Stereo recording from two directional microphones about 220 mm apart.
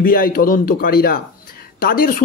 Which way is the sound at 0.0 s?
40° left (ahead or behind).